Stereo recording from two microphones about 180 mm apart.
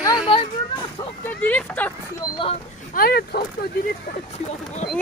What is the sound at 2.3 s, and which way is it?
Speech, 30° left (ahead or behind).